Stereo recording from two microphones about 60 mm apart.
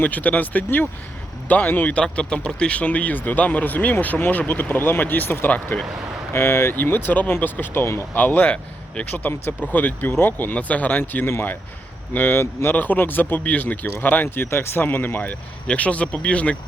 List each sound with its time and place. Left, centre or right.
0.0 s speech: left
1.7 s speech: left
2.0 s speech: centre
6.3 s speech: left
14.3 s speech: left
15.6 s speech: left